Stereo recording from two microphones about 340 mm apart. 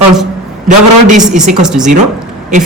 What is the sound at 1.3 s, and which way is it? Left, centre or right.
Speech, centre.